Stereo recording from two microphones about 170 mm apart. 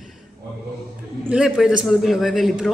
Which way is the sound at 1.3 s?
5° right (ahead or behind).